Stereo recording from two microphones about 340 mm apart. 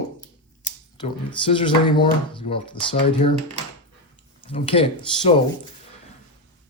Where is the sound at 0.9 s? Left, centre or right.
Centre.